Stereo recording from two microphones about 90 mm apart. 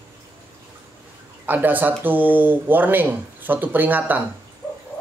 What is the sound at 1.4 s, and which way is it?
Speech, 20° right (ahead or behind).